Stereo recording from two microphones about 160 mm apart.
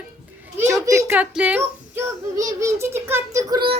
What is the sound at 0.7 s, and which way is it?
A child's voice, 15° right (ahead or behind).